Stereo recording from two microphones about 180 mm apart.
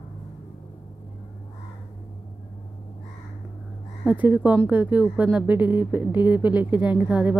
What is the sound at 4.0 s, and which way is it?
Speech, 10° right (ahead or behind).